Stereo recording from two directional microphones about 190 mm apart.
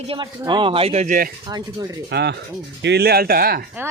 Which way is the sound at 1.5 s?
20° right (ahead or behind).